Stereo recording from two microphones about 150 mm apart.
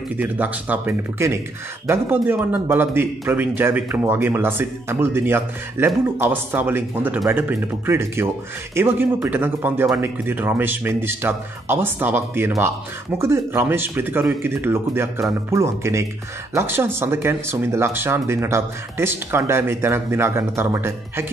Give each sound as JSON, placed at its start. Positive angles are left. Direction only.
{"t": 0.2, "sound": "speech", "side_deg": -10}